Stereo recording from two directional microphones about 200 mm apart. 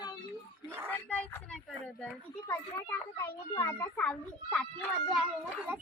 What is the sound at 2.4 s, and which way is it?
Speech, 10° left (ahead or behind).